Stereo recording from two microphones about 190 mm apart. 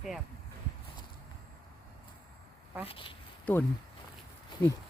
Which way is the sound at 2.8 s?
30° left (ahead or behind).